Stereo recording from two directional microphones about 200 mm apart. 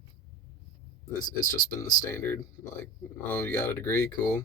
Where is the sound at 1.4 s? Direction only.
40° left (ahead or behind).